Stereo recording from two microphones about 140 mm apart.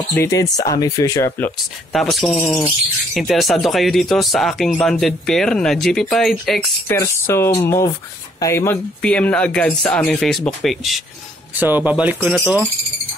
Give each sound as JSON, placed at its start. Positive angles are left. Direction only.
{"t": 0.1, "sound": "speech", "side_deg": 20}
{"t": 1.9, "sound": "speech", "side_deg": 0}
{"t": 2.4, "sound": "speech", "side_deg": 15}
{"t": 3.2, "sound": "speech", "side_deg": 0}
{"t": 6.9, "sound": "speech", "side_deg": 15}
{"t": 9.0, "sound": "speech", "side_deg": 10}
{"t": 11.6, "sound": "speech", "side_deg": -15}